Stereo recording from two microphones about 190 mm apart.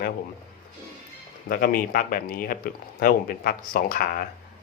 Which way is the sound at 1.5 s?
50° left (ahead or behind).